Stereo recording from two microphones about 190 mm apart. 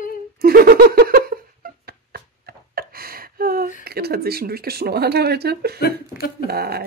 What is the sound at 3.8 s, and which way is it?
Speech, 55° right (ahead or behind).